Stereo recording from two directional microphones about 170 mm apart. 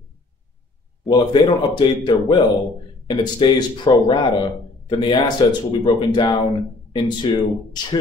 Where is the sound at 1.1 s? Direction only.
25° left (ahead or behind).